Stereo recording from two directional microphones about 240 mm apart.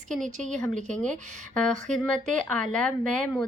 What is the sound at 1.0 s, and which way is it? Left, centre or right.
Speech, centre.